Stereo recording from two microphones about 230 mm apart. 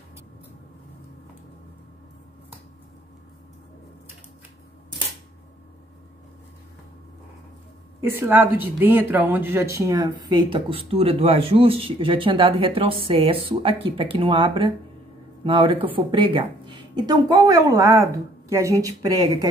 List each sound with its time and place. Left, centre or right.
8.2 s a woman's voice: centre